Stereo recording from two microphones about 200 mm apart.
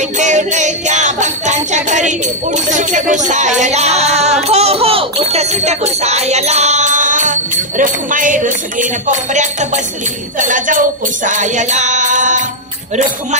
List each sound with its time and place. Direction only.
0.2 s music: 35° right (ahead or behind)